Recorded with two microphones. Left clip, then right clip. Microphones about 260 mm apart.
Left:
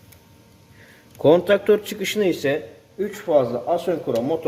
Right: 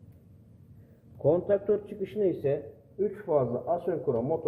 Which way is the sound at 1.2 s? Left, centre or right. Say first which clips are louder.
Left 9 dB; left.